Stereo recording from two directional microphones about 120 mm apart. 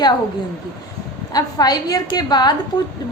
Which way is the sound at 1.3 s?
35° left (ahead or behind).